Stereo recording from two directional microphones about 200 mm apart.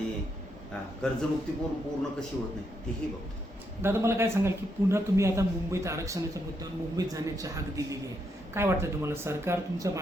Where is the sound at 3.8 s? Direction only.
15° right (ahead or behind).